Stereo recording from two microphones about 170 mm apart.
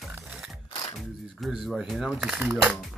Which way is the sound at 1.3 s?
Centre (ahead or behind).